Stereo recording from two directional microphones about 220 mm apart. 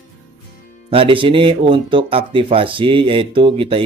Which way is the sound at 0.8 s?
25° right (ahead or behind).